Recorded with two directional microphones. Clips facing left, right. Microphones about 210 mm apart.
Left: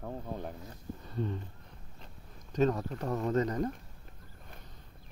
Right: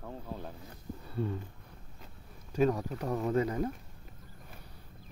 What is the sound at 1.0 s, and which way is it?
Speech, 10° right (ahead or behind).